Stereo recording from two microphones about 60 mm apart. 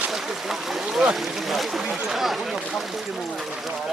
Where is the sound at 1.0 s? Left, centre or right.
Centre.